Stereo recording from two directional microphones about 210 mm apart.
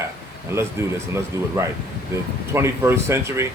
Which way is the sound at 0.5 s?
15° right (ahead or behind).